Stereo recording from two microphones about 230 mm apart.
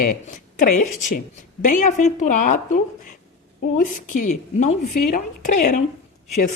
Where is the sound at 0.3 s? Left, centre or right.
Left.